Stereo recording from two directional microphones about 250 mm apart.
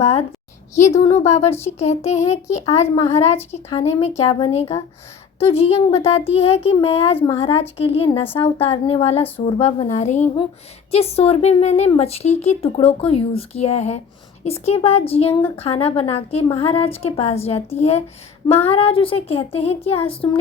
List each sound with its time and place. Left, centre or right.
0.0 s speech: left